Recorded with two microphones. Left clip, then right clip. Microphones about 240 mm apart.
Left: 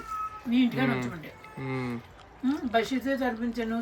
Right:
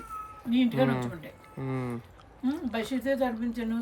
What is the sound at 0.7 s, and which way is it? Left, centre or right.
Speech, centre.